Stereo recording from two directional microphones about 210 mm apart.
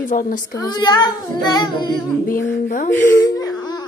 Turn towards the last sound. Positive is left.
turn(degrees=15)  # may be behind; listen again after turning